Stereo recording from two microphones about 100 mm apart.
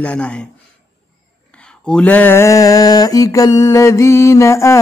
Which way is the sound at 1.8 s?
10° left (ahead or behind).